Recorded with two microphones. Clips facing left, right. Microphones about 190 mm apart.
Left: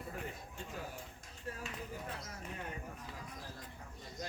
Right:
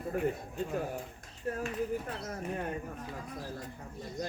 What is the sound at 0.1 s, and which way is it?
Speech, 55° right (ahead or behind).